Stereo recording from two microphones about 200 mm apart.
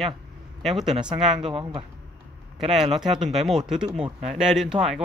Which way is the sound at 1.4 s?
25° right (ahead or behind).